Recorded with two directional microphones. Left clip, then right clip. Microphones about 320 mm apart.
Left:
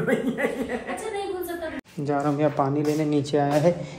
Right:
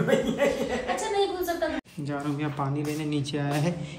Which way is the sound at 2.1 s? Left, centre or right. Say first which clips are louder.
Left 9 dB; centre.